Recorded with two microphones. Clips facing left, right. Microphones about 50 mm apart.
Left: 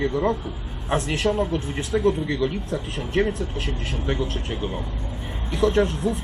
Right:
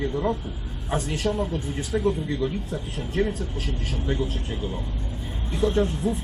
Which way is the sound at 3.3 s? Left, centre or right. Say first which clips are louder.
Left 3 dB; left.